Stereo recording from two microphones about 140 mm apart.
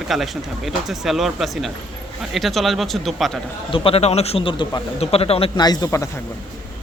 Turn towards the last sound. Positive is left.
turn(degrees=25)  # may be behind; listen again after turning